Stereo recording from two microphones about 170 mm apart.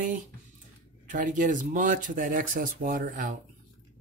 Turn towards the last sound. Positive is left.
turn(degrees=-55)  # may be behind; listen again after turning